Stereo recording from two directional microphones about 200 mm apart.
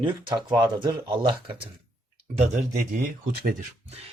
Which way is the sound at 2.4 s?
40° right (ahead or behind).